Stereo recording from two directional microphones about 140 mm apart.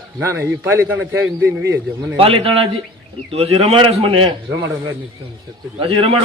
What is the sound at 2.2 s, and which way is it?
A man's voice, 40° right (ahead or behind).